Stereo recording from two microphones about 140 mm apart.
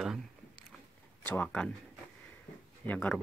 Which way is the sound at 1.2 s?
10° left (ahead or behind).